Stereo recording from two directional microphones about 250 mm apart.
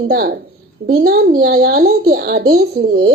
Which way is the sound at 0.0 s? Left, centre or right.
Right.